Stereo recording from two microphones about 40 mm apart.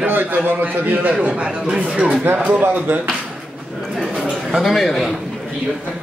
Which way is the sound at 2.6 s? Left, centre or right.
Right.